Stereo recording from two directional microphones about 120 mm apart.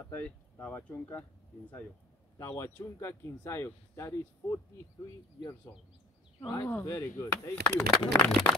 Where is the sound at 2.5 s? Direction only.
20° left (ahead or behind).